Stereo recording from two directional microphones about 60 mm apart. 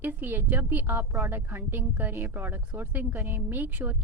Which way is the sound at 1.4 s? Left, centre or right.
Right.